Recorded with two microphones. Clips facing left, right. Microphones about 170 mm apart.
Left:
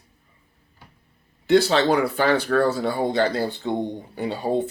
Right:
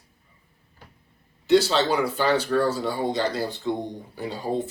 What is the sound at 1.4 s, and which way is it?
Speech, 55° left (ahead or behind).